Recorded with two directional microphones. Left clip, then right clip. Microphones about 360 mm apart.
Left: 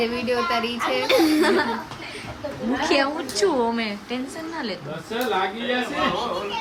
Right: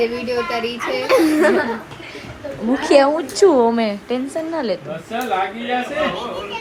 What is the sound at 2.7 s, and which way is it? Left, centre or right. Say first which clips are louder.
Speech: right 8 dB; centre.